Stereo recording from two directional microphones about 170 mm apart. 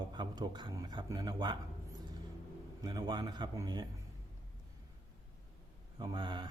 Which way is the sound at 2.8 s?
25° right (ahead or behind).